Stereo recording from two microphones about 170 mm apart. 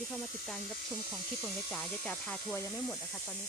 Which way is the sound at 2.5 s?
20° left (ahead or behind).